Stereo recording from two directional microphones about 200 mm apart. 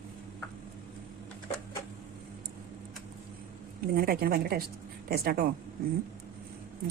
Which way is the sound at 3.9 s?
50° right (ahead or behind).